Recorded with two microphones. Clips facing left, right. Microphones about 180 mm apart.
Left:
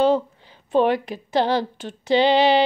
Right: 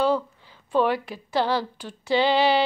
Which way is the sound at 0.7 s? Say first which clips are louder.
Left 4 dB; 20° left (ahead or behind).